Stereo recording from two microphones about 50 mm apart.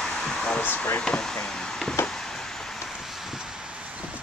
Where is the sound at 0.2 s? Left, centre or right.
Centre.